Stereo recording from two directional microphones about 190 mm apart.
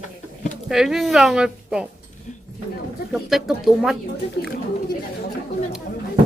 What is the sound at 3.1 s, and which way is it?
Speech, centre (ahead or behind).